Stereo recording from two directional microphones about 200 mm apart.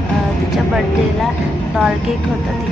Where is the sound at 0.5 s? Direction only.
Centre (ahead or behind).